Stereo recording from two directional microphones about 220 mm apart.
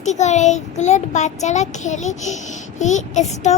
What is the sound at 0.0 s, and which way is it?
A child's voice, 30° left (ahead or behind).